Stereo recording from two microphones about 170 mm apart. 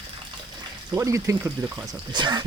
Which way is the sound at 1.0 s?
15° right (ahead or behind).